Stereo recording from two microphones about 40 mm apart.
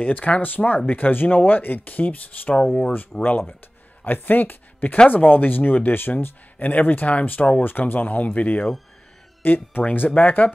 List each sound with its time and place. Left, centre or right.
0.0 s speech: left
2.5 s speech: left
3.3 s speech: left
9.4 s speech: left